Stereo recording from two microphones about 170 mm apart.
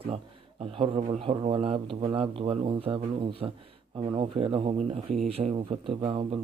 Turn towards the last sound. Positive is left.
turn(degrees=-30)  # may be behind; listen again after turning